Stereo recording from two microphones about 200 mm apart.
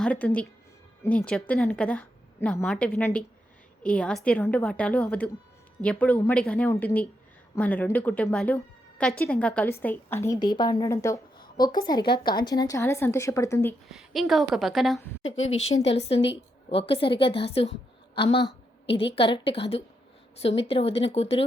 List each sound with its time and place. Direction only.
0.0 s a woman's voice: 5° left (ahead or behind)
13.8 s a woman's voice: centre (ahead or behind)
15.2 s a woman's voice: 75° left (ahead or behind)
15.5 s a woman's voice: 35° left (ahead or behind)